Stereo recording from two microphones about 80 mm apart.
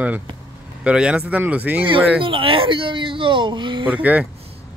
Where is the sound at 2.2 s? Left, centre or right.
Right.